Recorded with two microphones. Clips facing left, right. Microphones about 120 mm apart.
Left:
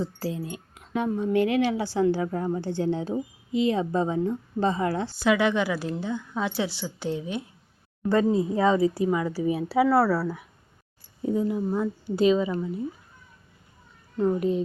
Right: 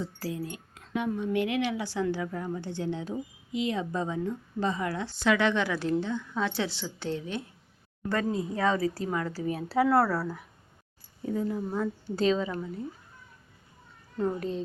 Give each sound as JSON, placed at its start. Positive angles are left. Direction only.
{"t": 0.0, "sound": "speech", "side_deg": 30}
{"t": 0.9, "sound": "a woman's voice", "side_deg": 35}
{"t": 5.1, "sound": "a woman's voice", "side_deg": 5}
{"t": 8.1, "sound": "speech", "side_deg": 25}
{"t": 9.0, "sound": "a woman's voice", "side_deg": 10}
{"t": 14.3, "sound": "a woman's voice", "side_deg": 10}